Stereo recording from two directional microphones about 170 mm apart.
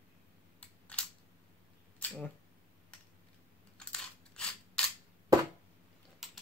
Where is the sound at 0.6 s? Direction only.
5° left (ahead or behind).